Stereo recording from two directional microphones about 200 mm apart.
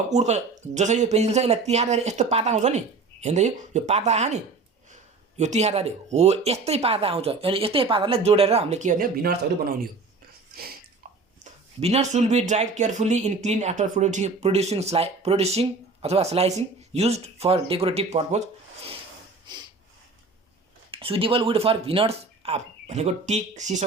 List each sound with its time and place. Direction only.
0.1 s speech: 35° right (ahead or behind)
5.4 s speech: 35° right (ahead or behind)
11.8 s speech: 30° right (ahead or behind)
19.5 s a sound: 20° right (ahead or behind)
20.9 s speech: 25° right (ahead or behind)